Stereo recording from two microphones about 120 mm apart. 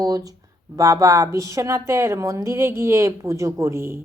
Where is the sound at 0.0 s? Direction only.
30° right (ahead or behind).